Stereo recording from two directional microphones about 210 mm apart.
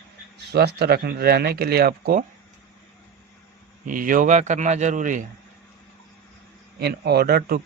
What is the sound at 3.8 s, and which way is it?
Speech, 40° right (ahead or behind).